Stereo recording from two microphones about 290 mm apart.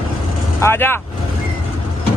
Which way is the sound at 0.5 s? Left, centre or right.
Centre.